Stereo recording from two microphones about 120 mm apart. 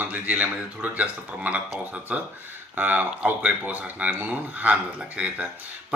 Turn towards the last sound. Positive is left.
turn(degrees=-10)  # may be behind; listen again after turning